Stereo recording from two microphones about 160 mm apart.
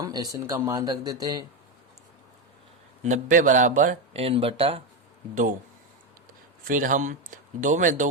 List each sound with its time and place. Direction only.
0.0 s speech: 25° right (ahead or behind)
3.0 s speech: 55° right (ahead or behind)
4.2 s speech: 35° right (ahead or behind)
5.3 s speech: 50° right (ahead or behind)
6.7 s speech: 55° right (ahead or behind)